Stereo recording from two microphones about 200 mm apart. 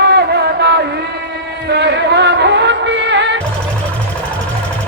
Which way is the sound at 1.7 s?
55° right (ahead or behind).